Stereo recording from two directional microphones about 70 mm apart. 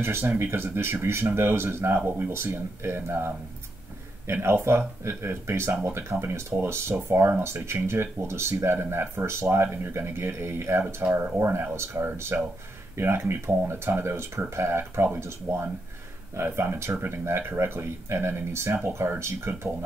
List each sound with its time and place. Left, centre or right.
0.0 s speech: right
4.3 s speech: right